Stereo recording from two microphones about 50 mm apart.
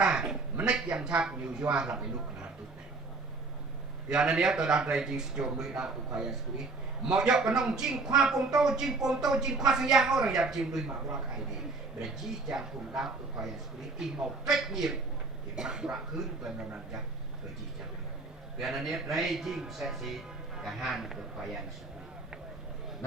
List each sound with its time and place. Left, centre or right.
0.0 s a sound: centre
1.1 s speech: right
4.1 s speech: centre
12.0 s speech: centre
18.6 s speech: centre